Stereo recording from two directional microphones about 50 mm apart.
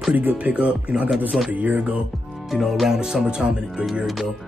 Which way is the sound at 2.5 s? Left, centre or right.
Centre.